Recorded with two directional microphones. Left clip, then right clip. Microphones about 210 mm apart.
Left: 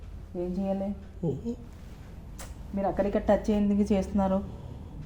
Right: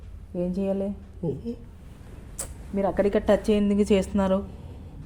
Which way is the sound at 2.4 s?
50° right (ahead or behind).